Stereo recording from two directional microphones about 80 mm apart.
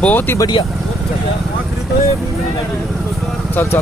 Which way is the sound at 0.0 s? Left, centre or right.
Left.